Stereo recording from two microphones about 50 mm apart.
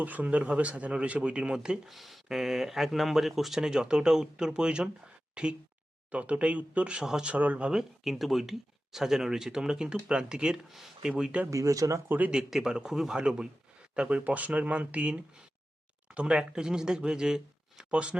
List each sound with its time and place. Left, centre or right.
0.0 s speech: right; by 1.8 s centre
1.9 s speech: centre; by 7.0 s right
7.0 s speech: centre
7.3 s speech: right
7.7 s speech: centre
10.7 s speech: centre
11.2 s speech: right
11.5 s speech: right
12.0 s speech: right
12.3 s speech: centre
13.9 s speech: right